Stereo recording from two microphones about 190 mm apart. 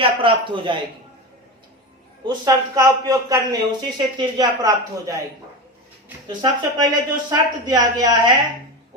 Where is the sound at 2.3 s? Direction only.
20° right (ahead or behind).